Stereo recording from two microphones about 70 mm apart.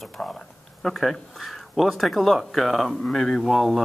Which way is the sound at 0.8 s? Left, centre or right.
Centre.